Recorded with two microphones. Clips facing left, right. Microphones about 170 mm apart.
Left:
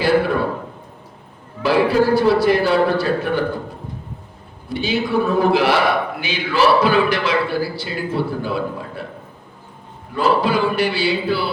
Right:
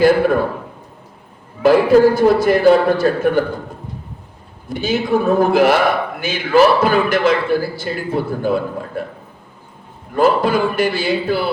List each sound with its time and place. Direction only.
1.6 s a man's voice: 45° right (ahead or behind)
4.7 s a man's voice: 45° right (ahead or behind)
10.2 s a man's voice: 45° right (ahead or behind)